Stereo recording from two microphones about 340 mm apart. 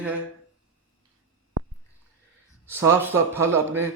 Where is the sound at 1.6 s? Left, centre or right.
Right.